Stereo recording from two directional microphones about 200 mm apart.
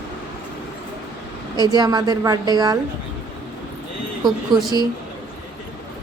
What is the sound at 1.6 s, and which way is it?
A woman's voice, 20° right (ahead or behind).